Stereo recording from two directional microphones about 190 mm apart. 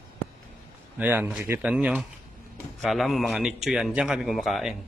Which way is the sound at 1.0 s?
10° right (ahead or behind).